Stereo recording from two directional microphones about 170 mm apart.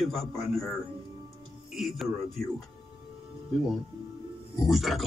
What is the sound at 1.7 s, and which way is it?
Speech, centre (ahead or behind).